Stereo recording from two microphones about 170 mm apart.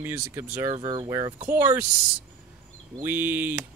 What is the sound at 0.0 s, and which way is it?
Speech, 15° right (ahead or behind).